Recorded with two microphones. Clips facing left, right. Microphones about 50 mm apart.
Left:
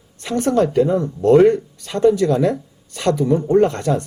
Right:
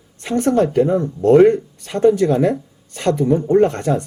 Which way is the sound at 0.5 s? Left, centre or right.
Right.